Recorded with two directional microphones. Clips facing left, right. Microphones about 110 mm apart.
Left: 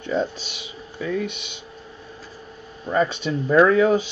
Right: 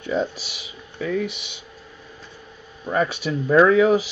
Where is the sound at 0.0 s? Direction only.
5° right (ahead or behind).